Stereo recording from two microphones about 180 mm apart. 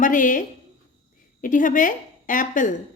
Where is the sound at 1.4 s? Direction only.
45° left (ahead or behind).